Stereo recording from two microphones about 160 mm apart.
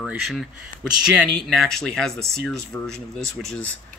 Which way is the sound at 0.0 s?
5° right (ahead or behind).